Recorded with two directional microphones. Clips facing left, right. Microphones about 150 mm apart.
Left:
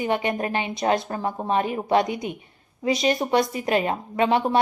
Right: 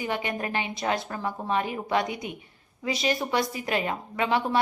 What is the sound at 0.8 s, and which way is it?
A woman's voice, 35° left (ahead or behind).